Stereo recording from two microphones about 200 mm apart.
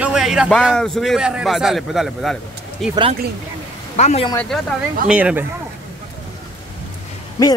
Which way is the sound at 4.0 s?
35° left (ahead or behind).